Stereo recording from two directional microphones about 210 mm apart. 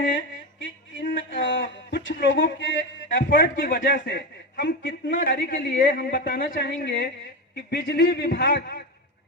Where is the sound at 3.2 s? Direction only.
45° left (ahead or behind).